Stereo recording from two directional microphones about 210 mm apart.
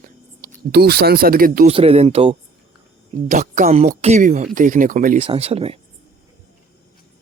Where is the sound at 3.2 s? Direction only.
35° right (ahead or behind).